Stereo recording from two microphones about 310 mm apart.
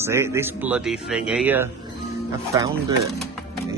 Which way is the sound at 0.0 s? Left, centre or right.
Centre.